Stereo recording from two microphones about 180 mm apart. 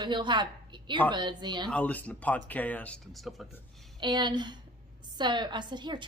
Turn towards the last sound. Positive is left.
turn(degrees=-25)  # may be behind; listen again after turning